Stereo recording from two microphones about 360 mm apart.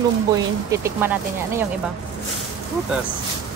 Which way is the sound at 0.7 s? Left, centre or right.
Centre.